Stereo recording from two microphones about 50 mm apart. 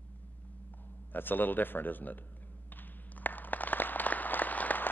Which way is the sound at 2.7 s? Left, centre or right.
Left.